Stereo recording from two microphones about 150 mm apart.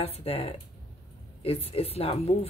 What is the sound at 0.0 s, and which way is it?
Speech, 40° left (ahead or behind).